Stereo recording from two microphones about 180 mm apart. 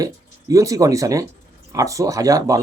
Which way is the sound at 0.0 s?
20° right (ahead or behind).